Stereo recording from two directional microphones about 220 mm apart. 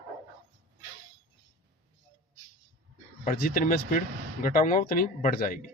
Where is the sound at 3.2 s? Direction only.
40° left (ahead or behind).